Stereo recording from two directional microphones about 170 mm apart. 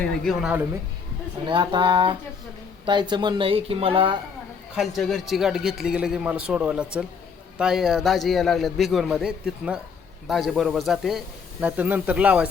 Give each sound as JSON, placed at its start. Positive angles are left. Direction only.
{"t": 0.3, "sound": "a man's voice", "side_deg": 0}
{"t": 1.5, "sound": "speech", "side_deg": -30}
{"t": 4.7, "sound": "a man's voice", "side_deg": 0}